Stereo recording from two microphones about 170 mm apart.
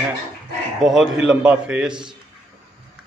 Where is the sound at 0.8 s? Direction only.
Centre (ahead or behind).